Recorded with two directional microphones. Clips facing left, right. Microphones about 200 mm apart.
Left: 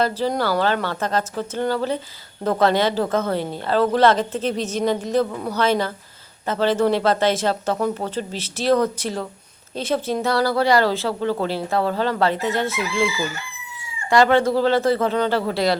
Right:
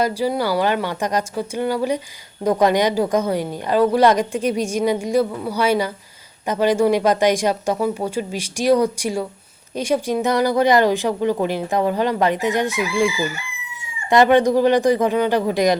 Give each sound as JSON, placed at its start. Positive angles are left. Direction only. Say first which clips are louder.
{"t": 0.0, "sound": "a woman's voice", "louder": "right 1 dB", "side_deg": -10}